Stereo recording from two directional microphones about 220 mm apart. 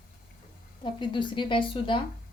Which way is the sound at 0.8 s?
20° left (ahead or behind).